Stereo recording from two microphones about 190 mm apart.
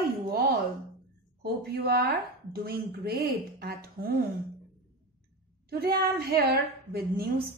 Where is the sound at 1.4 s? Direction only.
55° right (ahead or behind).